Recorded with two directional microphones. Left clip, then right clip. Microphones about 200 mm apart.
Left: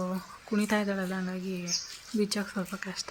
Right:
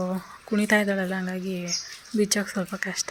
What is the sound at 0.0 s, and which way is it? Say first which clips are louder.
Speech: right 5 dB; 10° right (ahead or behind).